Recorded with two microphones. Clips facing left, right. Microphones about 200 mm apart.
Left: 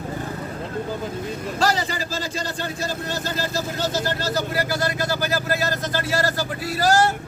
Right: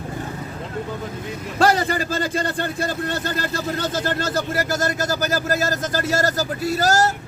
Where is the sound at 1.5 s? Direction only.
55° right (ahead or behind).